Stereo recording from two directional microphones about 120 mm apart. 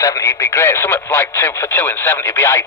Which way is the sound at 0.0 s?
25° left (ahead or behind).